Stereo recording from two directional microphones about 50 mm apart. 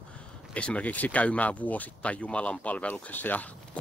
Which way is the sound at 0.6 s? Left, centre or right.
Left.